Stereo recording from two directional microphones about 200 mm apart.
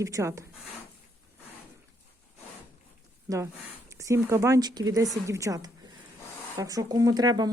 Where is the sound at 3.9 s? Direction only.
15° right (ahead or behind).